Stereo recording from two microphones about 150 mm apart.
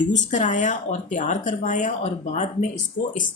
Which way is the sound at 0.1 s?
55° left (ahead or behind).